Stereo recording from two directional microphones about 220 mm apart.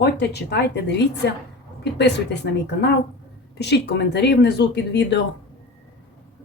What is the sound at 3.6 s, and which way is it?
Speech, 50° left (ahead or behind).